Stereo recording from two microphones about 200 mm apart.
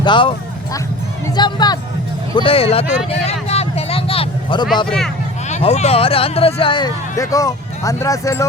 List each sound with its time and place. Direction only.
0.0 s speech: 25° left (ahead or behind)
3.1 s vehicle: 30° left (ahead or behind)
5.5 s speech: 35° left (ahead or behind); by 8.4 s 15° left (ahead or behind)